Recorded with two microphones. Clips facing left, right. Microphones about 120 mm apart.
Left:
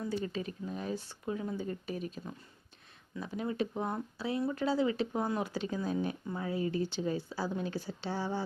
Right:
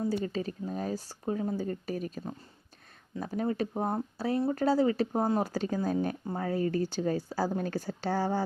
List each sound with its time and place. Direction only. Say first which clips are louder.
0.0 s speech: right 5 dB; 35° right (ahead or behind)